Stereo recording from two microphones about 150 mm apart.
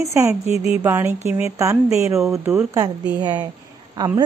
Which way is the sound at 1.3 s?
15° right (ahead or behind).